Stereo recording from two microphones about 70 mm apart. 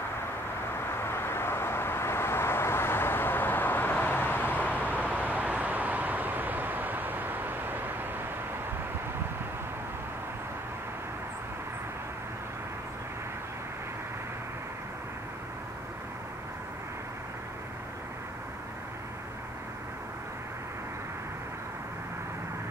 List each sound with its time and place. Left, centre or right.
0.7 s vehicle: left
4.7 s vehicle: right